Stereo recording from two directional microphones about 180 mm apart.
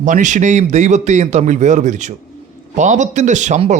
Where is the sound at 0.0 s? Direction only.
45° right (ahead or behind).